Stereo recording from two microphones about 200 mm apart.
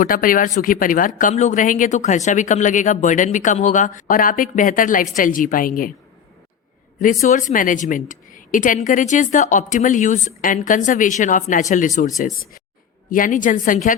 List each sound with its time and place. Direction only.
0.0 s a woman's voice: 45° left (ahead or behind)
7.0 s speech: 40° left (ahead or behind)